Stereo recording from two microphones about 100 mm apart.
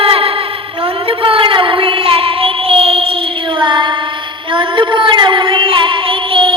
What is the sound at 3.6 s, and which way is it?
Child singing, 50° right (ahead or behind).